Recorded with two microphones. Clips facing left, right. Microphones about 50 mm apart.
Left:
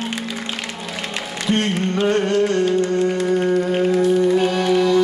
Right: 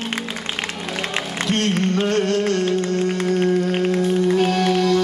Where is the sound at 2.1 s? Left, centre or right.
Centre.